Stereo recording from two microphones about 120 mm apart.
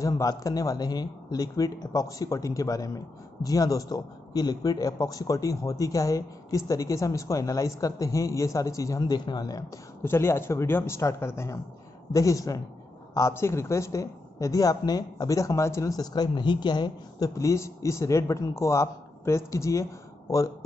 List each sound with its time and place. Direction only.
0.0 s a woman's voice: 30° left (ahead or behind)
10.0 s a woman's voice: 20° left (ahead or behind)